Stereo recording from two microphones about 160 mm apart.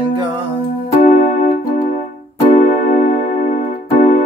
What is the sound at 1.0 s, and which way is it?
Music, 45° left (ahead or behind).